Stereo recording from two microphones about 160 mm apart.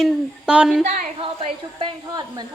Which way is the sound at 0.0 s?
5° right (ahead or behind).